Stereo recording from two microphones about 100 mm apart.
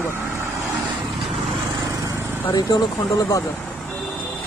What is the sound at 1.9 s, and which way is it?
Lawn mower, 35° right (ahead or behind).